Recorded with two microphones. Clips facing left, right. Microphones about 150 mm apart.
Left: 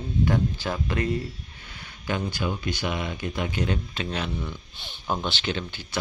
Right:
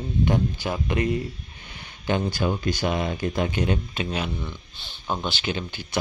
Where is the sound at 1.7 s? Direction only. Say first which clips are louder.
Right 4 dB; 25° right (ahead or behind).